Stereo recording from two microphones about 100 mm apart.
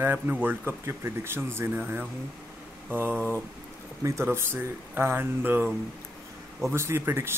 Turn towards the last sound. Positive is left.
turn(degrees=-25)  # may be behind; listen again after turning